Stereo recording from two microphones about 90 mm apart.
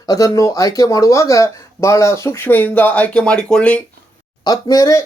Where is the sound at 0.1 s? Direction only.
40° left (ahead or behind); by 3.8 s 15° left (ahead or behind).